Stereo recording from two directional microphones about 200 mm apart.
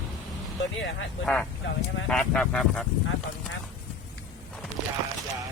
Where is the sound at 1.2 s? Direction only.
5° left (ahead or behind).